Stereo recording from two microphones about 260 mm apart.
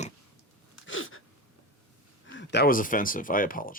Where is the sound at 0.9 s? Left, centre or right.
Left.